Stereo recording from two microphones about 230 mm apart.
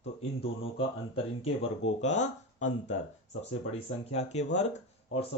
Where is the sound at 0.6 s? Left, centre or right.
Left.